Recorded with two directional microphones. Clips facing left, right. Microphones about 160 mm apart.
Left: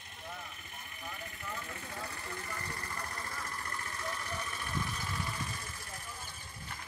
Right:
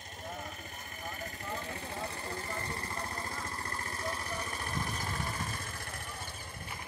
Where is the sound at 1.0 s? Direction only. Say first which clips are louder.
Right 3 dB; 40° right (ahead or behind).